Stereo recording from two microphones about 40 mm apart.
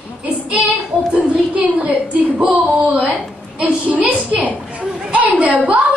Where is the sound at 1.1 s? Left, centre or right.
Right.